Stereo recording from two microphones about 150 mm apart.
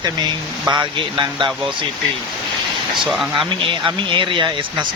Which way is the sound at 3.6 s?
35° right (ahead or behind).